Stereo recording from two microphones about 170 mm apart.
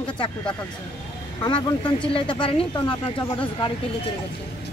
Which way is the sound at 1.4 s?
25° left (ahead or behind).